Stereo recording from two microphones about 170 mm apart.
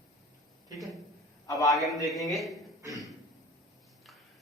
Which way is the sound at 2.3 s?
Centre (ahead or behind).